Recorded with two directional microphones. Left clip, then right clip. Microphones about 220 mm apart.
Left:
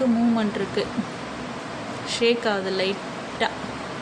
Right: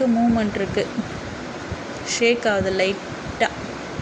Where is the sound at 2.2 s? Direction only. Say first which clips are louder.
Right 3 dB; 5° right (ahead or behind).